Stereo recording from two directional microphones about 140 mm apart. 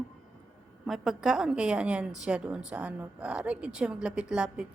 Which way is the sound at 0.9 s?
Centre (ahead or behind).